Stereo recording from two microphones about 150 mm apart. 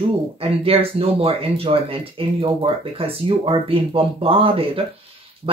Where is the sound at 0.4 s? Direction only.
40° right (ahead or behind).